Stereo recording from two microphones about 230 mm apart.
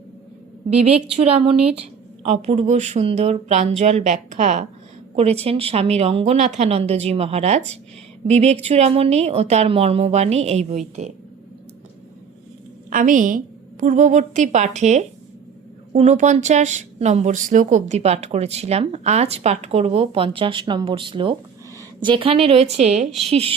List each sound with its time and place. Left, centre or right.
1.1 s speech: right
12.9 s a woman's voice: right